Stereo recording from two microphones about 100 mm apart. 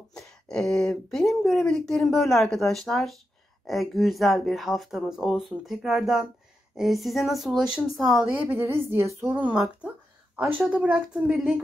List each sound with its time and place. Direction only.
0.1 s speech: 5° left (ahead or behind)
8.5 s a woman's voice: 25° right (ahead or behind)
9.6 s a sound: 10° right (ahead or behind)
10.7 s speech: 10° right (ahead or behind)